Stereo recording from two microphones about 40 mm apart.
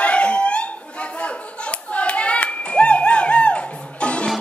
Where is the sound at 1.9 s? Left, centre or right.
Left.